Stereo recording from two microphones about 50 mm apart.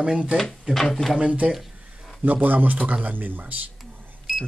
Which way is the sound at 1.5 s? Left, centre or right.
Centre.